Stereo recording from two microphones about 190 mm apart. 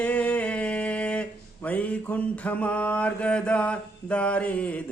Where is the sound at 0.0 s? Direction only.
10° left (ahead or behind).